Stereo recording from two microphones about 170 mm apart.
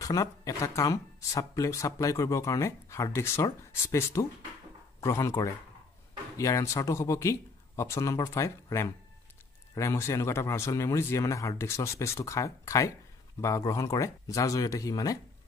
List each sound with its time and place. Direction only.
0.0 s speech: 20° left (ahead or behind)